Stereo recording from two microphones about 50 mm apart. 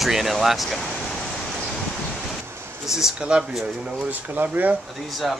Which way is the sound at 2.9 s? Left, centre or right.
Centre.